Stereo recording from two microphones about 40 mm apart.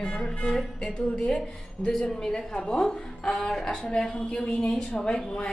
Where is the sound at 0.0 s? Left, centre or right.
Left.